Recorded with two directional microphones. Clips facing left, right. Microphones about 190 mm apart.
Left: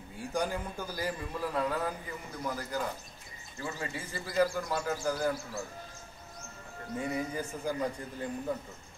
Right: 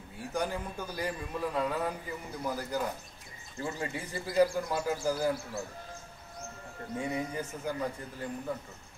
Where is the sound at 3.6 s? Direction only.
25° right (ahead or behind).